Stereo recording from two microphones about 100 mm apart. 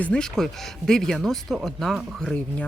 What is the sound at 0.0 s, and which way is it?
Speech, 10° left (ahead or behind).